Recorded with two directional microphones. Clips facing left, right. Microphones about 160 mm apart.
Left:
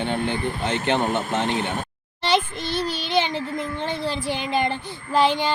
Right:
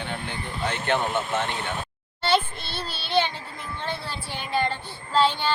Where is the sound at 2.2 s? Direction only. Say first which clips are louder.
Left 2 dB; 15° left (ahead or behind).